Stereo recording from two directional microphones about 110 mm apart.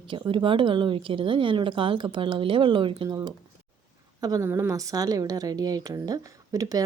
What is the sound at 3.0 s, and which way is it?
A woman's voice, 35° right (ahead or behind).